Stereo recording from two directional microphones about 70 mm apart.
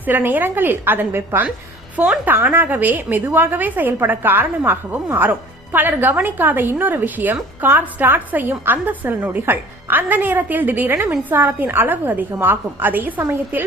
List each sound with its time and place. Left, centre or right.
0.0 s a woman's voice: right